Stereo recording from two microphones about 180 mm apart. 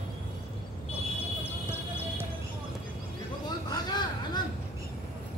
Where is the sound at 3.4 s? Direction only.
25° left (ahead or behind).